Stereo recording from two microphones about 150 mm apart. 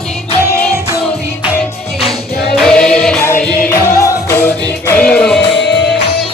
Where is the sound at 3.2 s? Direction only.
15° left (ahead or behind).